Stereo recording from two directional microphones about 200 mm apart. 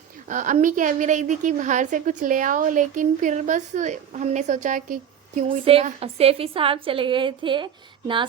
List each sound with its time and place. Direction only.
0.3 s a woman's voice: 40° right (ahead or behind)